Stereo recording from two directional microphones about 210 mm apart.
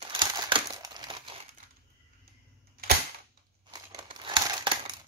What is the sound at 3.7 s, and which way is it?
Crumpling, 20° right (ahead or behind).